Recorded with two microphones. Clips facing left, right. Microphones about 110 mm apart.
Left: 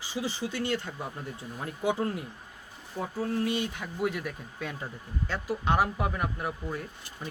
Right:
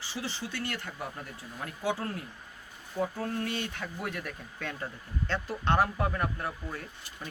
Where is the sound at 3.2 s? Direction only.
10° left (ahead or behind).